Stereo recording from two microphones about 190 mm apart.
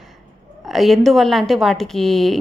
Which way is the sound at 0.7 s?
Centre (ahead or behind).